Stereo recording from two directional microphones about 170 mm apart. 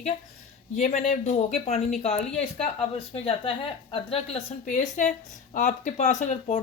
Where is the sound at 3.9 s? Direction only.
35° left (ahead or behind).